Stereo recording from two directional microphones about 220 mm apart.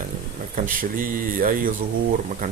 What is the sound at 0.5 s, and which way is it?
Speech, 40° right (ahead or behind).